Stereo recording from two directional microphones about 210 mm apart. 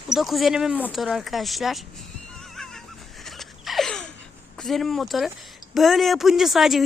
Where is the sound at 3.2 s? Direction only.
Centre (ahead or behind).